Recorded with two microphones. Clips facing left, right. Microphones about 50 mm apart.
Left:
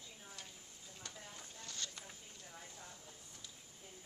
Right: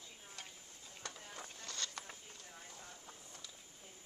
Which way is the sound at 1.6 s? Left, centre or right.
Right.